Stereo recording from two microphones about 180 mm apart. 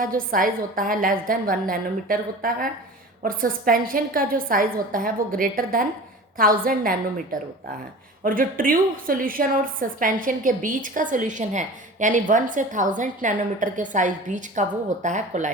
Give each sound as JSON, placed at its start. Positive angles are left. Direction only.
{"t": 0.0, "sound": "a woman's voice", "side_deg": -50}
{"t": 8.2, "sound": "a woman's voice", "side_deg": -50}